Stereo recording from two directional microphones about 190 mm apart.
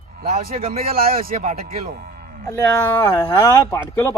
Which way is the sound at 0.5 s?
30° right (ahead or behind).